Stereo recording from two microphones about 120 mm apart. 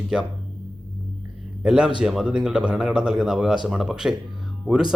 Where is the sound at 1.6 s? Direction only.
5° right (ahead or behind).